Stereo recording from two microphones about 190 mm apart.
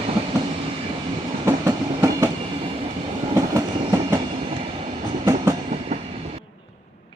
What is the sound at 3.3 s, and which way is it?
Train, 15° right (ahead or behind).